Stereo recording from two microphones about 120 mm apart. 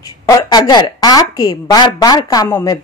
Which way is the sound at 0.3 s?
30° left (ahead or behind).